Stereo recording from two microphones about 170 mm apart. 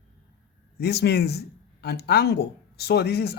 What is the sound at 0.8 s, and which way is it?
Speech, 70° left (ahead or behind).